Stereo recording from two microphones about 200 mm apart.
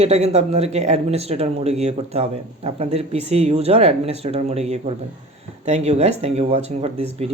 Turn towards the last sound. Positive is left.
turn(degrees=-30)  # may be behind; listen again after turning